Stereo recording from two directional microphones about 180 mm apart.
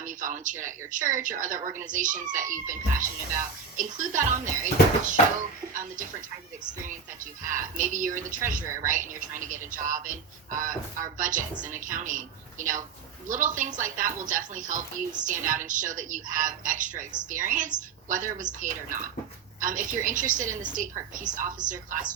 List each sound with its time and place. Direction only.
0.0 s speech: 45° right (ahead or behind)
7.4 s speech: 45° right (ahead or behind)